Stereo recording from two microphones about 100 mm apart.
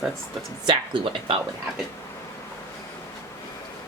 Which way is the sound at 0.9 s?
55° right (ahead or behind).